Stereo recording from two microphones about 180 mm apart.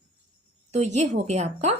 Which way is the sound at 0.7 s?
40° right (ahead or behind).